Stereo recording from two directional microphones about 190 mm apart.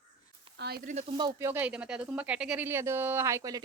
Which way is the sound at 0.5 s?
55° right (ahead or behind).